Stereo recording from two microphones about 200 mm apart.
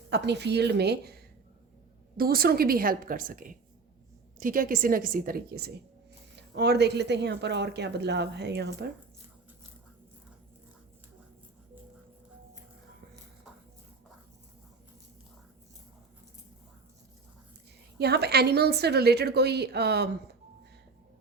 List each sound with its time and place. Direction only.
0.1 s speech: 55° right (ahead or behind)
2.1 s a woman's voice: 50° right (ahead or behind)
18.0 s speech: 55° right (ahead or behind)